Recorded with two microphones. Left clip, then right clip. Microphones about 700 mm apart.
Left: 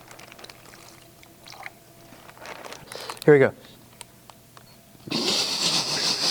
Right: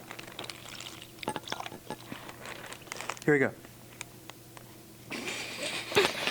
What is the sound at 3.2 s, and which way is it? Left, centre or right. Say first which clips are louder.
Speech: left 10 dB; centre.